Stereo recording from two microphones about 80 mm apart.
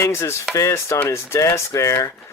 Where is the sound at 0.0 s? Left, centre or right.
Left.